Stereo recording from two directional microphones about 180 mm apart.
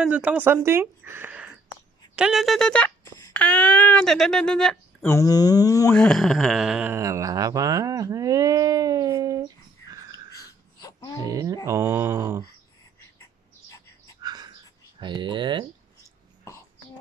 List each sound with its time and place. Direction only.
0.0 s speech: 5° right (ahead or behind)
5.0 s speech: 15° left (ahead or behind)
5.9 s speech: centre (ahead or behind); by 9.5 s 20° right (ahead or behind)
10.3 s a sound: 20° left (ahead or behind)
11.2 s mantra: 20° right (ahead or behind)
14.2 s a sound: 25° right (ahead or behind)
15.0 s speech: 25° right (ahead or behind)